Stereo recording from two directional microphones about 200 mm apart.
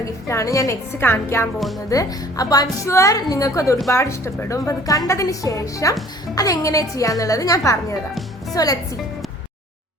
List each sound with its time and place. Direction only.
0.0 s a woman's voice: 15° left (ahead or behind)
1.5 s speech: centre (ahead or behind)
1.9 s a woman's voice: 15° left (ahead or behind)